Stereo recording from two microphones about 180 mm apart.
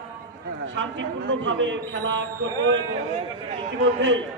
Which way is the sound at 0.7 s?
90° right.